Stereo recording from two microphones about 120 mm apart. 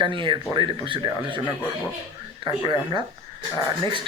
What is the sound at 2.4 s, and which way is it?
Speech, 40° right (ahead or behind).